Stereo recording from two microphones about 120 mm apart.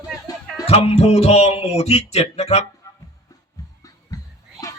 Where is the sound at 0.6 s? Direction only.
65° left (ahead or behind).